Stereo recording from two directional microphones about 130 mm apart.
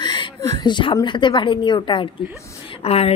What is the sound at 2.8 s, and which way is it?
Speech, 50° left (ahead or behind).